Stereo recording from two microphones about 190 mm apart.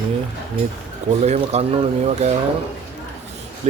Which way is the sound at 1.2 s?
35° right (ahead or behind).